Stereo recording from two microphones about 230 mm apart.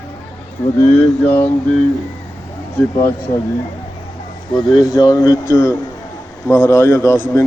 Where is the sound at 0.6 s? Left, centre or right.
Centre.